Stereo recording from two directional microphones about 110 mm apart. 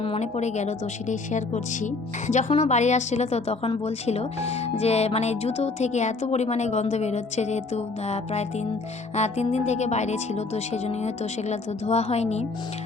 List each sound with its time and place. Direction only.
0.0 s speech: 75° left (ahead or behind)